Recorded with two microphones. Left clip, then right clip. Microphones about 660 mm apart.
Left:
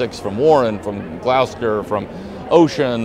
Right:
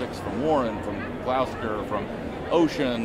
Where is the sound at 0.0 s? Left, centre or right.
Left.